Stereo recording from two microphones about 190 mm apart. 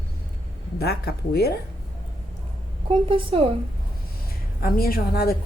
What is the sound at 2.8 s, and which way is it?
Speech, 30° right (ahead or behind).